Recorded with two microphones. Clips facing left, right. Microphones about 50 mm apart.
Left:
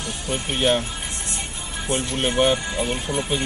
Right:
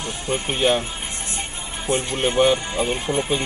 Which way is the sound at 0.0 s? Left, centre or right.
Right.